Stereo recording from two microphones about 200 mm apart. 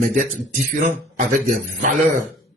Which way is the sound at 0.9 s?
40° right (ahead or behind).